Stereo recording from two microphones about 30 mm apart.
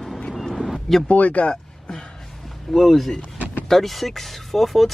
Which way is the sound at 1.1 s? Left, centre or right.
Left.